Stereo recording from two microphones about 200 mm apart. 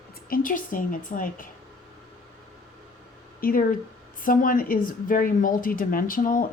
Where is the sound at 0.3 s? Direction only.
45° left (ahead or behind).